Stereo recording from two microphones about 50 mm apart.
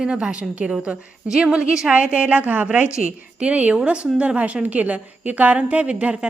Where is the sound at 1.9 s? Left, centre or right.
Right.